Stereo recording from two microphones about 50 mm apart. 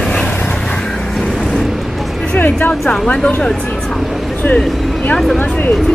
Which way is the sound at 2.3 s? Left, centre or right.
Left.